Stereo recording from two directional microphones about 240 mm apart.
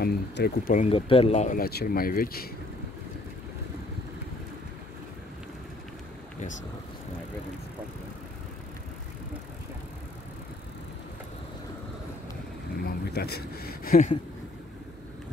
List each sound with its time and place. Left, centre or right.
0.0 s speech: left
0.8 s speech: left
12.8 s speech: left